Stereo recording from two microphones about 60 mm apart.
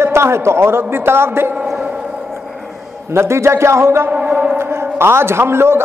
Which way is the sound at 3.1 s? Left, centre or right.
Right.